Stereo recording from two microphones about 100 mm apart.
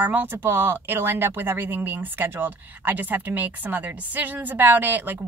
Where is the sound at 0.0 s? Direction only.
20° right (ahead or behind).